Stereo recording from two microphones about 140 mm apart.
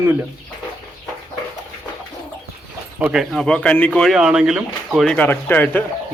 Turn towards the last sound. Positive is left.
turn(degrees=15)  # may be behind; listen again after turning